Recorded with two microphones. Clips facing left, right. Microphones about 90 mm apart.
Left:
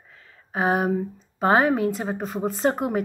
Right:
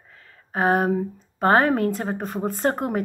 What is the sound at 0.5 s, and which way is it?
A woman's voice, 50° right (ahead or behind).